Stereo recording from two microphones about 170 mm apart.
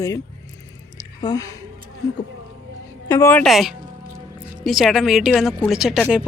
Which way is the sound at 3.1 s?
15° left (ahead or behind).